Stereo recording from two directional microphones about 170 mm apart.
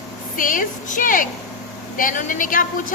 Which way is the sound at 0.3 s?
50° left (ahead or behind).